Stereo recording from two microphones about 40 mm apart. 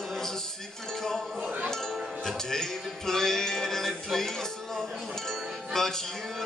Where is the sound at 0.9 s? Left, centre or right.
Centre.